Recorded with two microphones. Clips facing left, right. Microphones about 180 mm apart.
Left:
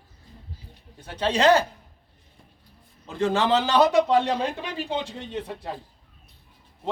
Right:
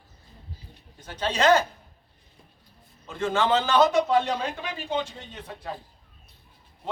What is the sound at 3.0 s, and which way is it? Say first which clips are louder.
A man's voice: left 2 dB; 35° left (ahead or behind).